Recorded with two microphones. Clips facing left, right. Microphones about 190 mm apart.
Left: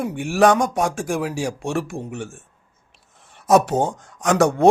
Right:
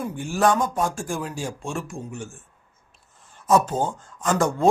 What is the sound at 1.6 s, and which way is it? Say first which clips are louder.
Speech: left 6 dB; 65° left (ahead or behind).